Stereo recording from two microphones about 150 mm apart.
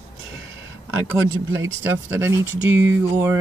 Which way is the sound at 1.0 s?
20° right (ahead or behind).